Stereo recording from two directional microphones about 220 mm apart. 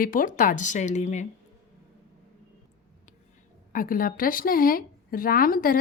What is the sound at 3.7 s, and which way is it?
Speech, 40° left (ahead or behind).